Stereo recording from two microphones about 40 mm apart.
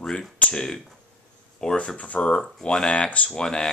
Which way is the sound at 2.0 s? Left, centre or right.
Left.